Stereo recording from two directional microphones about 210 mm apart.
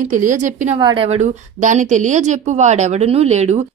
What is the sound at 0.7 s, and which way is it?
A woman's voice, 20° right (ahead or behind).